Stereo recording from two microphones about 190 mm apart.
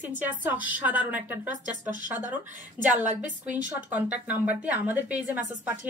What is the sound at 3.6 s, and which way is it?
A woman's voice, 10° right (ahead or behind).